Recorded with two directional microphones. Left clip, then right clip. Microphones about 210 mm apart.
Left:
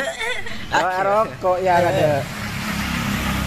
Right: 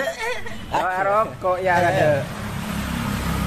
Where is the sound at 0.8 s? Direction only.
45° left (ahead or behind).